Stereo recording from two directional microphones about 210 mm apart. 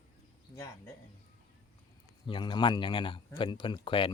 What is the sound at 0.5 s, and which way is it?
Speech, 15° left (ahead or behind).